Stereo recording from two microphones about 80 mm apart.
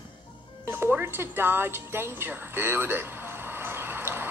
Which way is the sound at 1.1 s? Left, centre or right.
Right.